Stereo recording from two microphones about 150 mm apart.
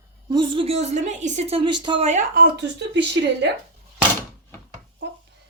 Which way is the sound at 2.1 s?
55° right (ahead or behind).